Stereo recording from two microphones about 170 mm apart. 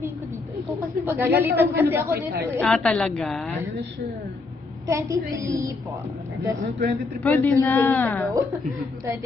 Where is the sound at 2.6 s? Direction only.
5° left (ahead or behind).